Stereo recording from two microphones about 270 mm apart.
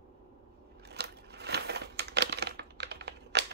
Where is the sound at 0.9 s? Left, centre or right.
Right.